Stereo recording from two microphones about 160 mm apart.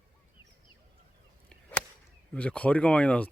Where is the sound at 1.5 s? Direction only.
5° left (ahead or behind).